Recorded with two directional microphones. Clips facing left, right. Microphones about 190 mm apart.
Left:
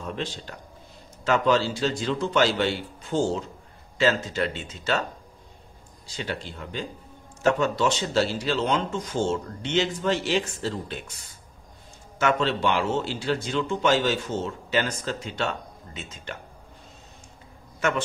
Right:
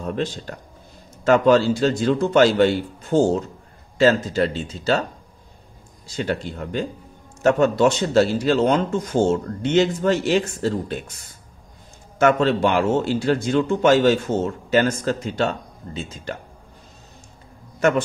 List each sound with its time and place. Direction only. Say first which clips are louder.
0.0 s a man's voice: right 7 dB; 45° right (ahead or behind)
6.1 s a man's voice: right 8 dB; 50° right (ahead or behind)
12.2 s a man's voice: right 7 dB; 50° right (ahead or behind)
17.7 s a man's voice: right 7 dB; 40° right (ahead or behind)